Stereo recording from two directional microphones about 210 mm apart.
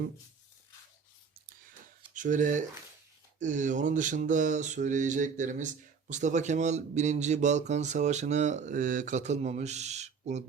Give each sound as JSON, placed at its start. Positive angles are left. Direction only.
{"t": 2.1, "sound": "mantra", "side_deg": -35}